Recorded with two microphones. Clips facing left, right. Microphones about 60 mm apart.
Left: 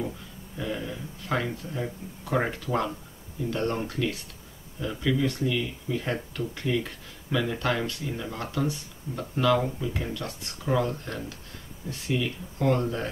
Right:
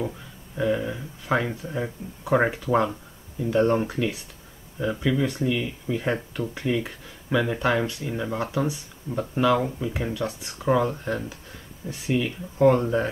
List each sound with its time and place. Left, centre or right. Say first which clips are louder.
0.6 s speech: right 8 dB; right